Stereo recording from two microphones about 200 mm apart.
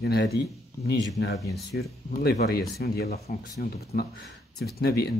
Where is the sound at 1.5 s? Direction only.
55° left (ahead or behind).